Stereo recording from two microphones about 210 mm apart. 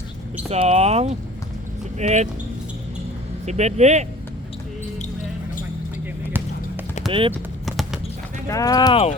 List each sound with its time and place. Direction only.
0.5 s speech: 30° right (ahead or behind)
3.4 s speech: 30° right (ahead or behind)
7.1 s speech: 25° right (ahead or behind)
7.6 s clip-clop: centre (ahead or behind)
8.4 s speech: 15° left (ahead or behind)